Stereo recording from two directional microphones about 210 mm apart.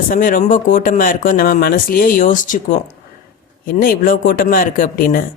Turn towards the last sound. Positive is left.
turn(degrees=40)  # may be behind; listen again after turning